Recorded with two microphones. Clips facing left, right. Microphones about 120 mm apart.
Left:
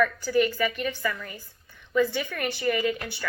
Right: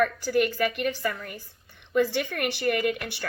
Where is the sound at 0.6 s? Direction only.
60° right (ahead or behind).